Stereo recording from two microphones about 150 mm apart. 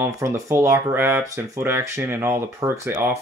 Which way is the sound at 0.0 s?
15° right (ahead or behind).